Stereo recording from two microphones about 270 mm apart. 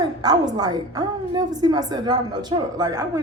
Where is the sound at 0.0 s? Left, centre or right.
Centre.